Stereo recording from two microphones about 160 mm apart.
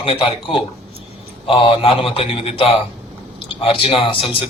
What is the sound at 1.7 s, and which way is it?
Speech, 35° left (ahead or behind).